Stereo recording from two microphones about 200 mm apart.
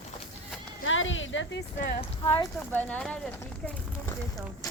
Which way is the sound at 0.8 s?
75° left (ahead or behind).